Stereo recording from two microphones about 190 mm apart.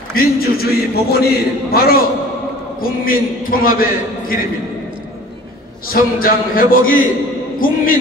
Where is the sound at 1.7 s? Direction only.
50° left (ahead or behind).